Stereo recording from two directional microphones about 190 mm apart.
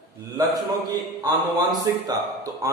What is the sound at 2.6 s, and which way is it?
Speech, 20° right (ahead or behind).